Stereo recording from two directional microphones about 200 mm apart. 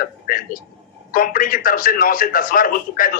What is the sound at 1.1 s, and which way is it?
A man's voice, 45° left (ahead or behind).